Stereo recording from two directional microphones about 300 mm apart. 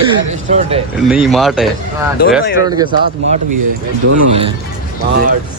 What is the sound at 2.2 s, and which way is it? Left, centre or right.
Speech, left.